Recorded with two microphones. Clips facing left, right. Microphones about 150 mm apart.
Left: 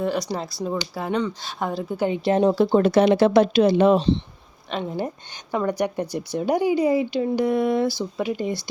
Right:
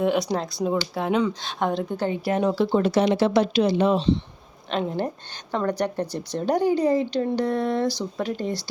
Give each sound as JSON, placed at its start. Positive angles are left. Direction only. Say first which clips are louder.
{"t": 0.0, "sound": "speech", "louder": "right 2 dB", "side_deg": 0}
{"t": 2.0, "sound": "speech", "louder": "left 5 dB", "side_deg": 20}
{"t": 2.6, "sound": "speech", "louder": "left 3 dB", "side_deg": 50}
{"t": 4.7, "sound": "speech", "louder": "right 1 dB", "side_deg": 5}